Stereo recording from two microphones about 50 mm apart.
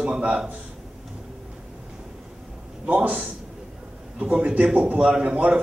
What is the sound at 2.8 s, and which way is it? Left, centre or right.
Speech, right.